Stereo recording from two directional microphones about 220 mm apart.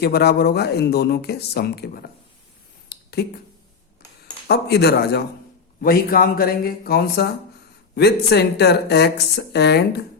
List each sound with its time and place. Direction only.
0.0 s speech: 45° left (ahead or behind)
2.9 s a sound: 45° left (ahead or behind)
4.4 s speech: 50° left (ahead or behind)